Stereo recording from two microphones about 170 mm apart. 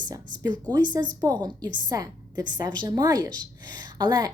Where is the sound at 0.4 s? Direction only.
25° right (ahead or behind).